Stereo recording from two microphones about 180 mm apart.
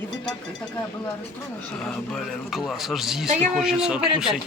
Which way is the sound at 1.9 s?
5° left (ahead or behind).